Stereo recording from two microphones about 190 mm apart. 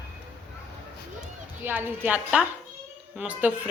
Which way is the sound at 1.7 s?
10° right (ahead or behind).